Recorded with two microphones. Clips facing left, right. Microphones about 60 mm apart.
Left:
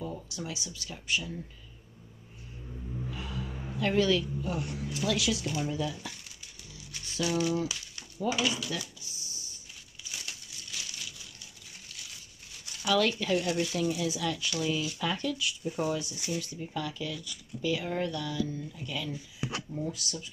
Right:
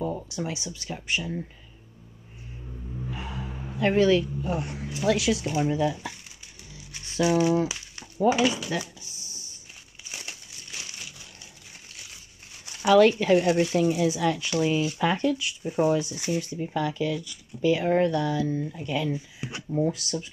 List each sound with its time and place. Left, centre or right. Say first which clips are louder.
0.0 s speech: right 8 dB; right
3.1 s vehicle: right 5 dB; right
3.7 s speech: right 6 dB; right
6.7 s a sound: right 1 dB; right
10.0 s crumpling: right 2 dB; right
12.6 s speech: right 9 dB; right